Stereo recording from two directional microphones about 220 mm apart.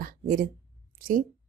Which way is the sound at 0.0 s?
40° right (ahead or behind).